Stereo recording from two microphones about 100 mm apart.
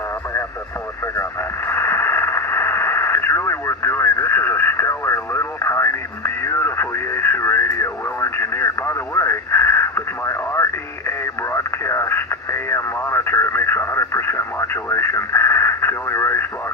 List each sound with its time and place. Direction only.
1.0 s radio: 25° left (ahead or behind)